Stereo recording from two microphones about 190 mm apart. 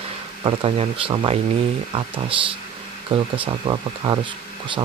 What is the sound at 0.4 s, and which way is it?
Speech, 30° right (ahead or behind).